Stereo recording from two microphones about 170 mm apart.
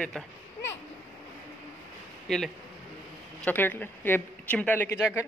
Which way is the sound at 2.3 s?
Centre (ahead or behind).